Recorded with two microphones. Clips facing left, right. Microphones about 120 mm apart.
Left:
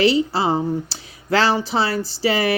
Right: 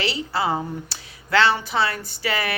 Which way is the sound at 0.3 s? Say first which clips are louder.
Left 4 dB; 35° left (ahead or behind).